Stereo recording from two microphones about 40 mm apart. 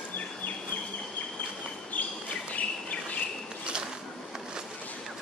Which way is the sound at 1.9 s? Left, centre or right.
Left.